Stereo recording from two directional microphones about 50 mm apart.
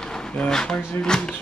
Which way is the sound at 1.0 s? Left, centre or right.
Centre.